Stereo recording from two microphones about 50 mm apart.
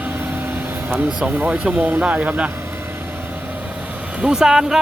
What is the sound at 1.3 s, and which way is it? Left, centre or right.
Speech, right.